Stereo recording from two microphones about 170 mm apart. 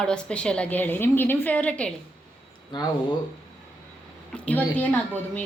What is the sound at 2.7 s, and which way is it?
Speech, 25° left (ahead or behind).